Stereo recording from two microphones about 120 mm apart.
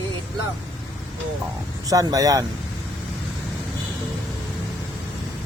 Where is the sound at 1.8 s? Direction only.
30° right (ahead or behind).